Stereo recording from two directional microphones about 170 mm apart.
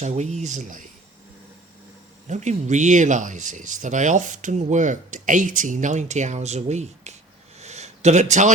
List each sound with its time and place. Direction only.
0.0 s speech: 45° right (ahead or behind)
2.2 s speech: 45° right (ahead or behind)
7.6 s a sound: 40° right (ahead or behind)